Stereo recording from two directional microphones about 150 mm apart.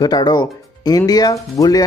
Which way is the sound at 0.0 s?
25° left (ahead or behind).